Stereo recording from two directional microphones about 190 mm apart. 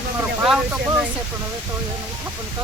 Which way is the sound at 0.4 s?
Centre (ahead or behind).